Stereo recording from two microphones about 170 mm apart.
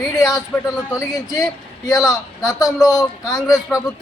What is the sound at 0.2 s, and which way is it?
Speech, 20° left (ahead or behind).